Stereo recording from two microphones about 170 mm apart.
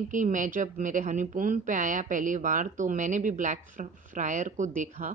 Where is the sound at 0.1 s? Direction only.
50° right (ahead or behind).